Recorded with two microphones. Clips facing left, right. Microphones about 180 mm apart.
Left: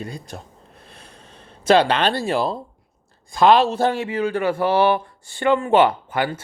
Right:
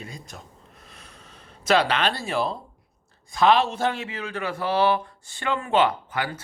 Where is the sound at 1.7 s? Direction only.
30° left (ahead or behind).